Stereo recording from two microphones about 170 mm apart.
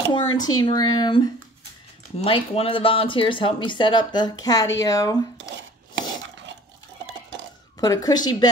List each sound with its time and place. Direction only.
0.1 s speech: 25° left (ahead or behind)
7.8 s speech: 20° left (ahead or behind)